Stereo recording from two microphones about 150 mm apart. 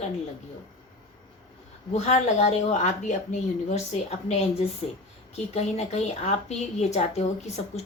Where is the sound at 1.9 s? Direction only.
50° left (ahead or behind).